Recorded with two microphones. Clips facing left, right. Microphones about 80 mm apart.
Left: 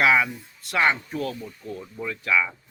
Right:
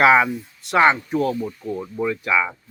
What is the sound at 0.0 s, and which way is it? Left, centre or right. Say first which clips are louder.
A man's voice: right 6 dB; right.